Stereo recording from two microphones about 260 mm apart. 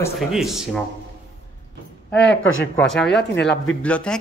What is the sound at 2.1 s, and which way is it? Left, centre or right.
Speech, left.